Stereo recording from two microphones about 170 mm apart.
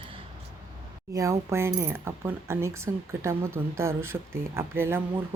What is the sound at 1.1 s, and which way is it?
Speech, 15° right (ahead or behind).